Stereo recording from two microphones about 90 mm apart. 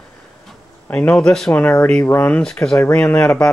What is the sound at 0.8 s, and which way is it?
Speech, 20° left (ahead or behind).